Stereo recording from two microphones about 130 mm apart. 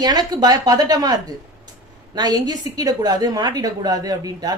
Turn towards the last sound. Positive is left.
turn(degrees=-30)  # may be behind; listen again after turning